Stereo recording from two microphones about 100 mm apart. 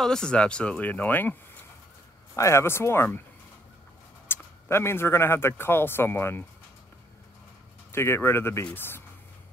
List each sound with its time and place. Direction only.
0.0 s speech: 5° left (ahead or behind)
2.3 s speech: 30° left (ahead or behind)
4.3 s speech: 25° left (ahead or behind)
7.9 s speech: 25° left (ahead or behind)